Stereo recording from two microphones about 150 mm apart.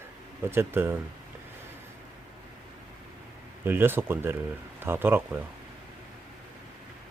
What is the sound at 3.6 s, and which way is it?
Speech, 15° right (ahead or behind).